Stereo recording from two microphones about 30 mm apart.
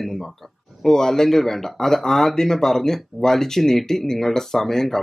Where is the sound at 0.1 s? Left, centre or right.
Centre.